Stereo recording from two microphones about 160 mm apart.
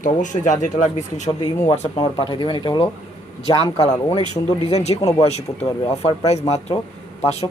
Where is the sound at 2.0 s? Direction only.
30° left (ahead or behind).